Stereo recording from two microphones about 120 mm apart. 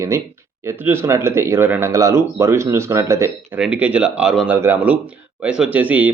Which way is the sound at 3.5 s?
10° right (ahead or behind).